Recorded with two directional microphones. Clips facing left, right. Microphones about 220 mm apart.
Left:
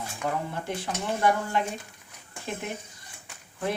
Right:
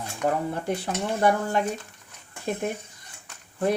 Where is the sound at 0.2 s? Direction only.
40° right (ahead or behind).